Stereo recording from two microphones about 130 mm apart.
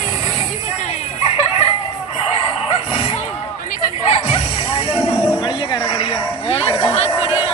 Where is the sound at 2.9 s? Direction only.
50° left (ahead or behind).